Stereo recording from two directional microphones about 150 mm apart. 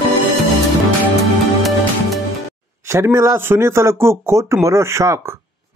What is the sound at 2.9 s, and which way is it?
A man's voice, 20° right (ahead or behind).